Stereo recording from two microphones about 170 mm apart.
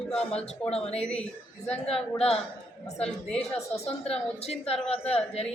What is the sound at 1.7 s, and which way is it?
Speech, 35° left (ahead or behind).